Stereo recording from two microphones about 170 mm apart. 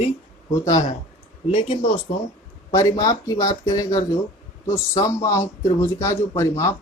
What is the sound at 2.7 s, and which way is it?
Speech, 20° left (ahead or behind).